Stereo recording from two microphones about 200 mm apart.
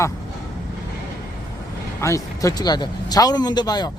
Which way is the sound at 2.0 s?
15° left (ahead or behind).